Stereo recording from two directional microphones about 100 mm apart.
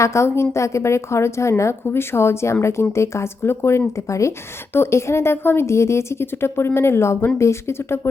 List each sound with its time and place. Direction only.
0.0 s speech: 30° left (ahead or behind)